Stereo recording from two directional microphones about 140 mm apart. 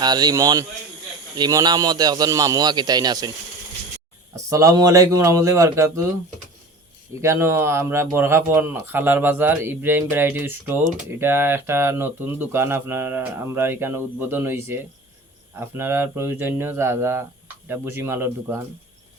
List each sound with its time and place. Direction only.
0.0 s a man's voice: 30° right (ahead or behind)
4.4 s a man's voice: 20° right (ahead or behind)
7.2 s speech: 20° right (ahead or behind)